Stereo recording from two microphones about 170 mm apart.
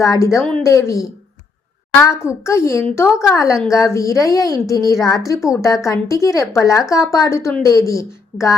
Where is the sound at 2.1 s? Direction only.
15° left (ahead or behind).